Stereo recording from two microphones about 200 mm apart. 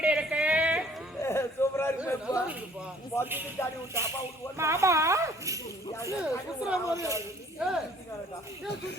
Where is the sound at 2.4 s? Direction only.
10° right (ahead or behind).